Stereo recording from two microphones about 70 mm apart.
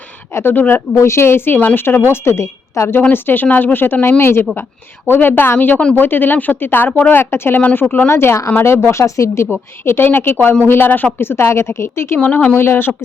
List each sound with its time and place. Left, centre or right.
0.3 s a woman's voice: left
0.9 s a woman's voice: left
3.1 s a woman's voice: left
8.1 s a woman's voice: left
12.2 s a woman's voice: left